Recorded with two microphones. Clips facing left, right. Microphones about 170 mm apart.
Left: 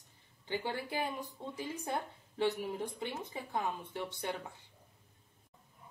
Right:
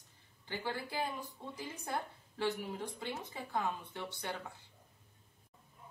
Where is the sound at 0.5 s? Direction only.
15° left (ahead or behind).